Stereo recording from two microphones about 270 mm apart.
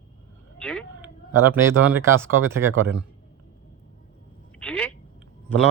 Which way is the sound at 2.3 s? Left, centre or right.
Right.